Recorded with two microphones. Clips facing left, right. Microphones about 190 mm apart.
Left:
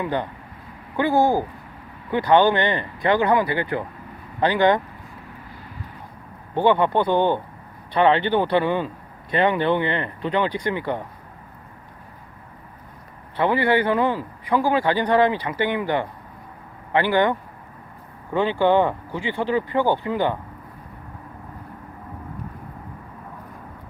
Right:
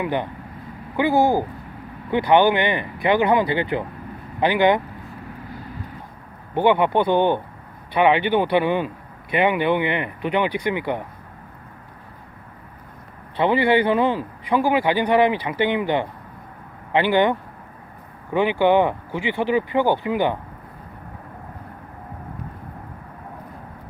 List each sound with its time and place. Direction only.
0.0 s a man's voice: 15° right (ahead or behind)
6.5 s a man's voice: 15° right (ahead or behind)
13.3 s a man's voice: 20° right (ahead or behind)
18.3 s a man's voice: 15° right (ahead or behind)